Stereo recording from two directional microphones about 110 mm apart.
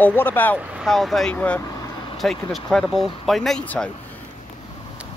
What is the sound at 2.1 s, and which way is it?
Speech, centre (ahead or behind).